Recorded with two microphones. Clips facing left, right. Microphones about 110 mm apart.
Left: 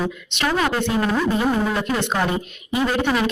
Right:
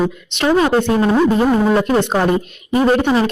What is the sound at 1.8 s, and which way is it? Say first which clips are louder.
Speech: right 7 dB; 35° right (ahead or behind).